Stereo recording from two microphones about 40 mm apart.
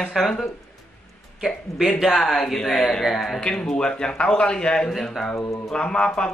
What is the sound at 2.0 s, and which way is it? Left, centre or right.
Speech, centre.